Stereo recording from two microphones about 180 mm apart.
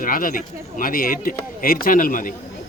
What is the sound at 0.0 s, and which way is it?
Speech, 50° left (ahead or behind).